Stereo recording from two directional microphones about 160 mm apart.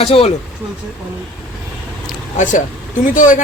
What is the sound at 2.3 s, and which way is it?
Speech, 50° left (ahead or behind).